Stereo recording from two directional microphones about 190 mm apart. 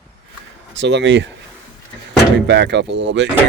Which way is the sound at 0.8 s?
70° right (ahead or behind).